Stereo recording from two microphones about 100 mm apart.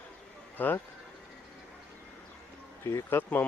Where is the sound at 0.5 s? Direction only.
20° left (ahead or behind).